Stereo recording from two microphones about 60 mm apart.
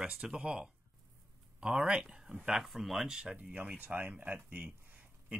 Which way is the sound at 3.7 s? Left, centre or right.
Right.